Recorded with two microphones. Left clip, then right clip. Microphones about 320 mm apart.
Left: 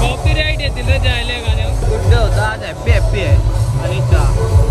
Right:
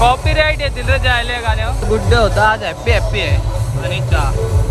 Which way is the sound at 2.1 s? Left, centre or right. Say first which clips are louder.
Right 7 dB; right.